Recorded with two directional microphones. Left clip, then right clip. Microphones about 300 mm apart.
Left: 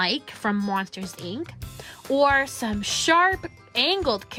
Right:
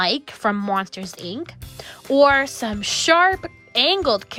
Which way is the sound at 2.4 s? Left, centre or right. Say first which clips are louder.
Right 3 dB; right.